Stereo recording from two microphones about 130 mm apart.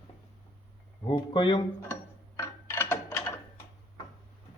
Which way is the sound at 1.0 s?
40° left (ahead or behind).